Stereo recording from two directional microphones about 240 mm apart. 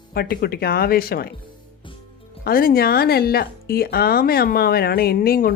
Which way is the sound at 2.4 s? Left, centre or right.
Left.